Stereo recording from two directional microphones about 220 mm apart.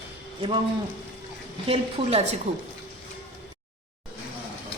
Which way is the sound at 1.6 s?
25° right (ahead or behind).